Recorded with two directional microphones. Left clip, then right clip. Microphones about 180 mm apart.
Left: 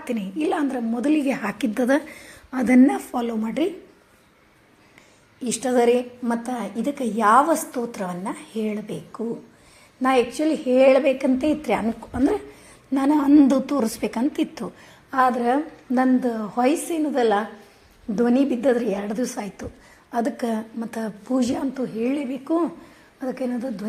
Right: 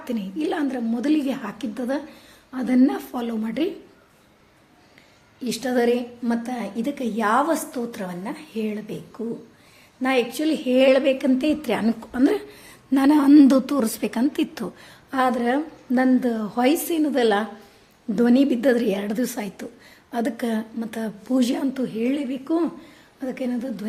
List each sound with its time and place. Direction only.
0.1 s a woman's voice: 5° left (ahead or behind)
1.4 s a woman's voice: 30° left (ahead or behind)
2.8 s a woman's voice: 10° left (ahead or behind)
5.4 s a woman's voice: 10° left (ahead or behind); by 13.6 s 25° right (ahead or behind)
13.7 s a woman's voice: 10° right (ahead or behind)